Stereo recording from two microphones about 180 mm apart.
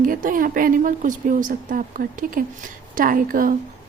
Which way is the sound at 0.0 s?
50° right (ahead or behind).